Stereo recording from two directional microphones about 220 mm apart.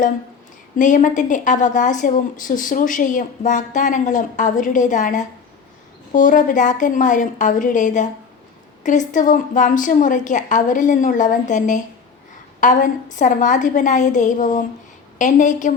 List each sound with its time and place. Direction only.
0.8 s a woman's voice: 35° left (ahead or behind)